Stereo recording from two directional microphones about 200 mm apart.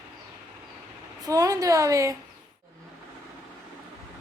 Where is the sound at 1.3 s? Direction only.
15° right (ahead or behind).